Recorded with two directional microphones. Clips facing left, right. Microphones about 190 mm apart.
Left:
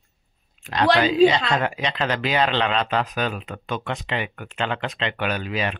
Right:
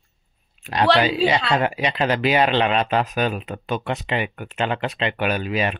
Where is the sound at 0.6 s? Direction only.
15° right (ahead or behind).